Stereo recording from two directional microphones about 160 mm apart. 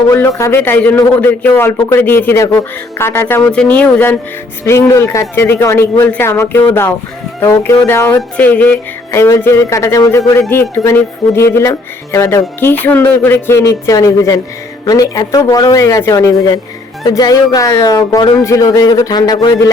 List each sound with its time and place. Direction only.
0.1 s speech: 15° left (ahead or behind)